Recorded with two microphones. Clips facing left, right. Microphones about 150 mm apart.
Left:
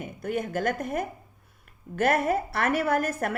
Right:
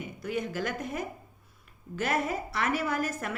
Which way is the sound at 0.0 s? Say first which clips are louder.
Left 3 dB; 50° left (ahead or behind).